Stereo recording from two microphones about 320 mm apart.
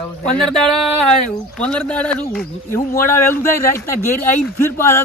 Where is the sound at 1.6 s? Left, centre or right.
Centre.